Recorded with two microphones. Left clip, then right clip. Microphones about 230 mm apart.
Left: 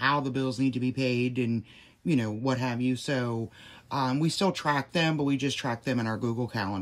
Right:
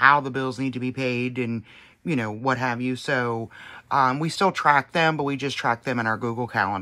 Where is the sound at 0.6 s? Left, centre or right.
Centre.